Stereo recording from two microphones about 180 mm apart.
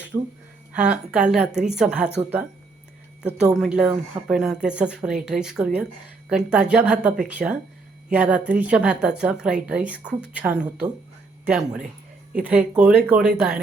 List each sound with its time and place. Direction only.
0.1 s a woman's voice: 10° right (ahead or behind)
3.6 s a woman's voice: 5° right (ahead or behind)